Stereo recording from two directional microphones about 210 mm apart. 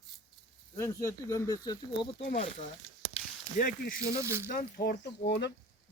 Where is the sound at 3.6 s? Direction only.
40° left (ahead or behind).